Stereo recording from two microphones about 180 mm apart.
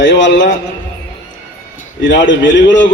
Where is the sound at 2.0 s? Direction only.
90° left.